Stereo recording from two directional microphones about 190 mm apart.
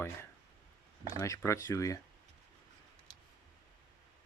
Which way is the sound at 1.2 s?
15° left (ahead or behind).